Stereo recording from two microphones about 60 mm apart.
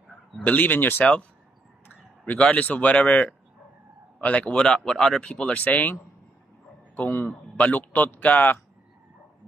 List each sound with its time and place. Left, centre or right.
0.4 s speech: left
2.4 s a man's voice: left
5.4 s a man's voice: left
7.0 s a man's voice: left